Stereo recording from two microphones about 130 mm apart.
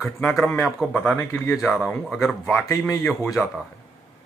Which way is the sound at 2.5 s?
20° left (ahead or behind).